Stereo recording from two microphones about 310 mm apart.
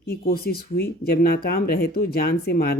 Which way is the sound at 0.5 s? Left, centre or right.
Left.